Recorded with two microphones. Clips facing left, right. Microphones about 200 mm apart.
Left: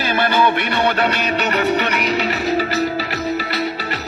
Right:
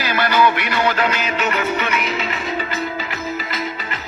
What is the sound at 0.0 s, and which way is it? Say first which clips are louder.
Music: even; 30° left (ahead or behind).